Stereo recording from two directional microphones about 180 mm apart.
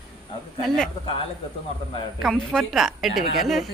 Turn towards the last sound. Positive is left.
turn(degrees=0)  # may be behind; listen again after turning